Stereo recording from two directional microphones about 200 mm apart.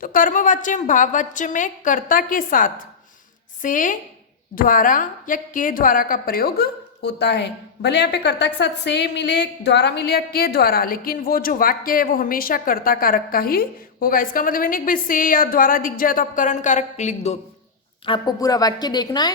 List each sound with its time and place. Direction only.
0.0 s a woman's voice: 40° left (ahead or behind)
18.0 s a woman's voice: 20° left (ahead or behind)